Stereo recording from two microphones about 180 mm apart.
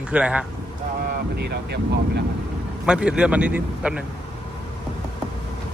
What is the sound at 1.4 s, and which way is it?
Speech, 65° right (ahead or behind).